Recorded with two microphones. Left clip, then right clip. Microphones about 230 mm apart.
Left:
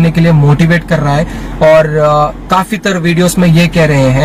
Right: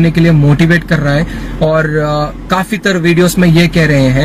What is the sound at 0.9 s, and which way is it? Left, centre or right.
Speech, left.